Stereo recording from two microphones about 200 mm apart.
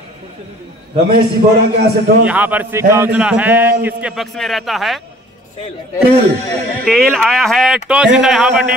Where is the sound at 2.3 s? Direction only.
10° right (ahead or behind).